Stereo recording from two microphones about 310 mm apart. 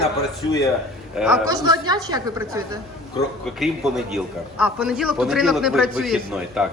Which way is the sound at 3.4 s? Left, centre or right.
Centre.